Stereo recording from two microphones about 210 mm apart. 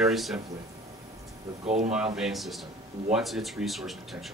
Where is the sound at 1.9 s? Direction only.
5° right (ahead or behind).